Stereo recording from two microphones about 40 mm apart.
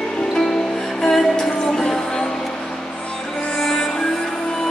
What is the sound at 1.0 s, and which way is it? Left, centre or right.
Music, centre.